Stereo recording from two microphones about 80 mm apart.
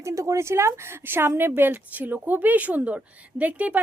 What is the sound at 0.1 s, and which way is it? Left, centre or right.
Speech, right.